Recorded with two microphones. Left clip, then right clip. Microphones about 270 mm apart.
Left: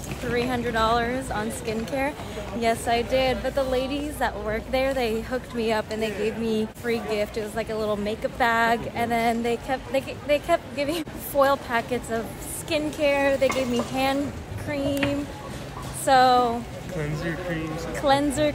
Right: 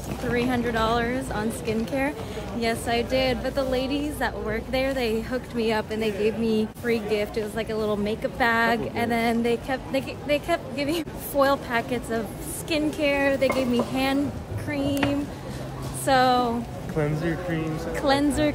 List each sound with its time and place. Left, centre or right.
0.3 s a woman's voice: centre
14.7 s a woman's voice: centre
16.1 s a woman's voice: centre
17.0 s speech: right
17.9 s a woman's voice: centre